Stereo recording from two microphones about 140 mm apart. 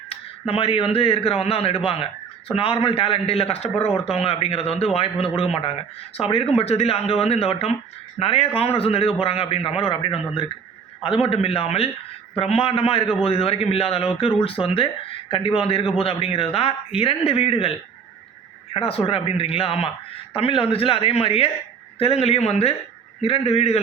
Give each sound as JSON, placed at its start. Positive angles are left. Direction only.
{"t": 0.1, "sound": "speech", "side_deg": 45}